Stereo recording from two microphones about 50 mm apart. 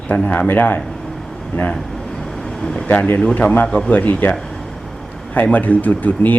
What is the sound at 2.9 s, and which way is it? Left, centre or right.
Speech, left.